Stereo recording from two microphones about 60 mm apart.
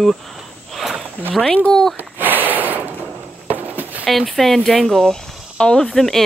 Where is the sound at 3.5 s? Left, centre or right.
Right.